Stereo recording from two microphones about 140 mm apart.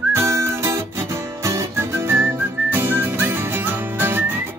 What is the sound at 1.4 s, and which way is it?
Music, 20° right (ahead or behind).